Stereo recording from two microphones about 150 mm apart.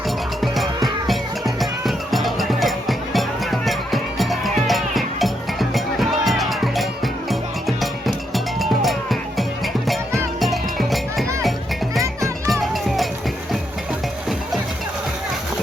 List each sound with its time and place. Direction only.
0.4 s music: centre (ahead or behind)
8.6 s music: centre (ahead or behind)
10.4 s music: centre (ahead or behind)